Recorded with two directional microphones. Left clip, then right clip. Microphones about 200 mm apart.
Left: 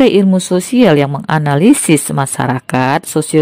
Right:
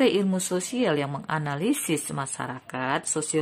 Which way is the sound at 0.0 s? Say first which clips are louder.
Left 13 dB; 40° left (ahead or behind).